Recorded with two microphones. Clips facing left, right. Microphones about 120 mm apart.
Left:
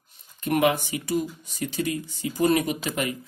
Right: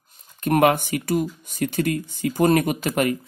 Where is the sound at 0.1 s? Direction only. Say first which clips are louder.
Right 4 dB; 55° right (ahead or behind).